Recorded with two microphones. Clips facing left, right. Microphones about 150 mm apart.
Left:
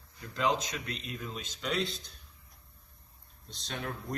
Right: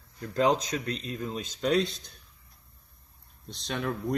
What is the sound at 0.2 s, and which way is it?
Speech, 40° right (ahead or behind).